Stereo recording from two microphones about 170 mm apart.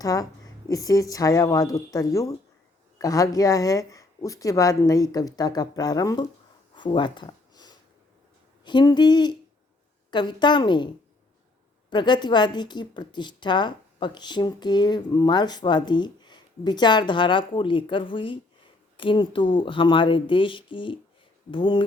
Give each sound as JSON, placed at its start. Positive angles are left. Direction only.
{"t": 0.0, "sound": "a woman's voice", "side_deg": 20}
{"t": 6.7, "sound": "a sound", "side_deg": 25}
{"t": 8.6, "sound": "a woman's voice", "side_deg": 25}
{"t": 11.9, "sound": "a woman's voice", "side_deg": 25}